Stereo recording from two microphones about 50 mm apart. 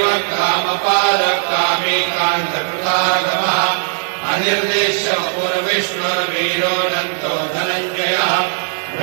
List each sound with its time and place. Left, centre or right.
0.0 s mantra: left
7.2 s mantra: left